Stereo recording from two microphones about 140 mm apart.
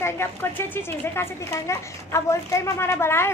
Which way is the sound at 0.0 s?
15° left (ahead or behind).